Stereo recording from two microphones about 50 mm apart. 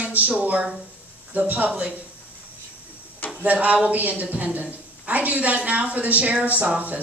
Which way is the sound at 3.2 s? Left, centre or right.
Left.